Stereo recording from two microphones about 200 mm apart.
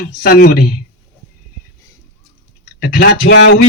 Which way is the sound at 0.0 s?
50° left (ahead or behind).